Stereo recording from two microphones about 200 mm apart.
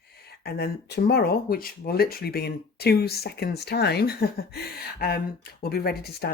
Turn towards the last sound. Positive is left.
turn(degrees=50)  # may be behind; listen again after turning